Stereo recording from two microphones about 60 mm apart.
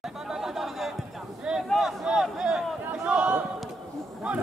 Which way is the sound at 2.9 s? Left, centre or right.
Right.